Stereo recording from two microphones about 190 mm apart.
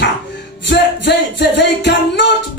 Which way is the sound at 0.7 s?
65° left (ahead or behind).